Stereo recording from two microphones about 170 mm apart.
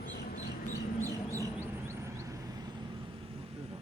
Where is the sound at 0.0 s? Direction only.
60° left (ahead or behind).